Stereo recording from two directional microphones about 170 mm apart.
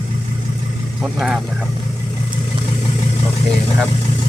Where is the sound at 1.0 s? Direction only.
5° right (ahead or behind).